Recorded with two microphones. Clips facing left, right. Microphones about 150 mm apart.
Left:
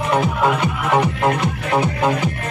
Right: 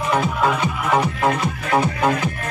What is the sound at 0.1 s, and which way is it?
Speech, 15° left (ahead or behind).